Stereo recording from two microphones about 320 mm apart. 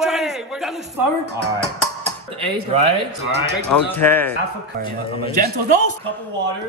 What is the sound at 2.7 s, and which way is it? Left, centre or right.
Speech, centre.